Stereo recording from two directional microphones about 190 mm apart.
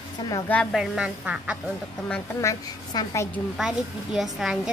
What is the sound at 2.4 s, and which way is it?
Speech, 20° left (ahead or behind).